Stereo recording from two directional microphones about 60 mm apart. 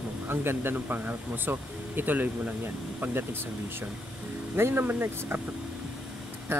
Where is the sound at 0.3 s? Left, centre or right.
Right.